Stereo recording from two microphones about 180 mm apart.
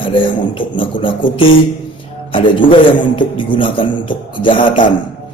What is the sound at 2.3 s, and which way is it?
A man's voice, 30° left (ahead or behind).